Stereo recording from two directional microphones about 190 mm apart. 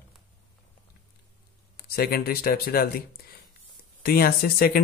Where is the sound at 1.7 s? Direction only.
55° left (ahead or behind).